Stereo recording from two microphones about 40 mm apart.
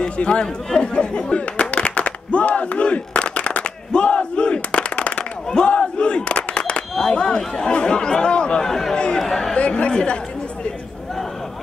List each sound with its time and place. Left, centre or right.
0.0 s speech: left
3.9 s battle cry: left
7.1 s speech: left
8.6 s speech: centre
8.9 s a man's voice: left
9.6 s speech: left